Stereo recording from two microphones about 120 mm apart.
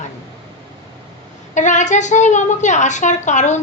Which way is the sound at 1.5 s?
90° left.